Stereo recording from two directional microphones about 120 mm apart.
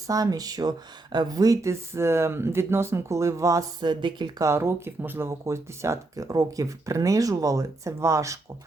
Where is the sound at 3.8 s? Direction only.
40° right (ahead or behind).